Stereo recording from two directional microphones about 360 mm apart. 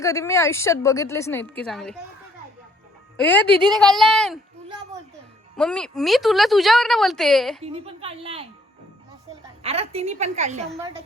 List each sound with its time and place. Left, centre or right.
0.0 s a woman's voice: centre
3.2 s speech: centre
5.5 s speech: centre
7.6 s a woman's voice: centre
9.6 s a woman's voice: centre